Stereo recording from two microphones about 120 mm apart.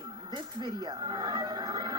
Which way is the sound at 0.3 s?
35° right (ahead or behind).